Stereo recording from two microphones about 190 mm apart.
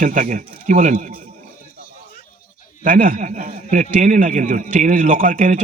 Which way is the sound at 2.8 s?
45° right (ahead or behind).